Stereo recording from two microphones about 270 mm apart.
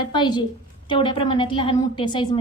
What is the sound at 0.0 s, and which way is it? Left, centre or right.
A woman's voice, centre.